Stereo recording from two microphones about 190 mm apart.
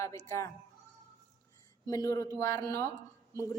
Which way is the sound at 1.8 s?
15° left (ahead or behind).